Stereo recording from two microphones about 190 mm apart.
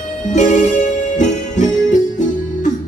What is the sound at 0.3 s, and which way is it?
Music, 40° left (ahead or behind).